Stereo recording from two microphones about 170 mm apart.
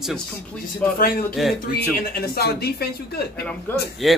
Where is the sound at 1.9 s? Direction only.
65° left (ahead or behind).